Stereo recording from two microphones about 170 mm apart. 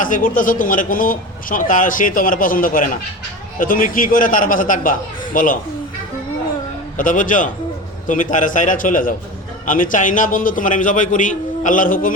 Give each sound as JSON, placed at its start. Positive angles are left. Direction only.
{"t": 0.0, "sound": "a man's voice", "side_deg": 50}
{"t": 6.9, "sound": "a man's voice", "side_deg": 50}